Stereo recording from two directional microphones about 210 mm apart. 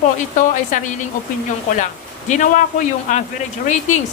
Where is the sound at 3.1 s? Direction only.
35° left (ahead or behind).